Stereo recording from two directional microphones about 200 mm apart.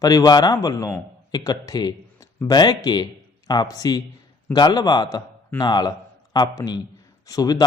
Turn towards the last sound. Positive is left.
turn(degrees=20)  # may be behind; listen again after turning